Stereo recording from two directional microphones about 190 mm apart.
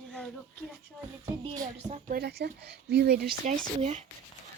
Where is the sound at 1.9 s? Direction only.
45° right (ahead or behind).